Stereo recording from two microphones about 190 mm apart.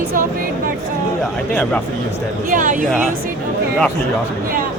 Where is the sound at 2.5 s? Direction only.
45° right (ahead or behind).